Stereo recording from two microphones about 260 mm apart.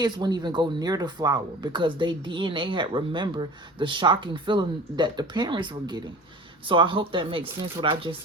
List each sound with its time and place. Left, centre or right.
0.0 s speech: centre